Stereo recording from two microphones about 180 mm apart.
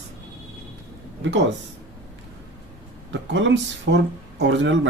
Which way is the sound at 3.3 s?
90° right.